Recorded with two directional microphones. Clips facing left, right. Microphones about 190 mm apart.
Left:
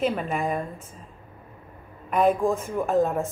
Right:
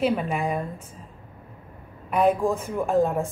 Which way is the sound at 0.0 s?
5° right (ahead or behind).